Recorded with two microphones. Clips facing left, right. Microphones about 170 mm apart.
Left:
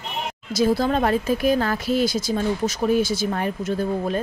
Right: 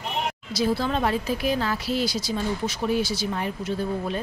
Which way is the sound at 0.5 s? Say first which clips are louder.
Left 5 dB; 45° left (ahead or behind).